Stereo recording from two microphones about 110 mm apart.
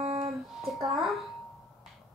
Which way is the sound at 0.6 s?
Centre (ahead or behind).